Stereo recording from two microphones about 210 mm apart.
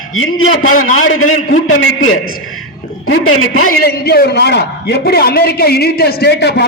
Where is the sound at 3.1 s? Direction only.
75° left (ahead or behind).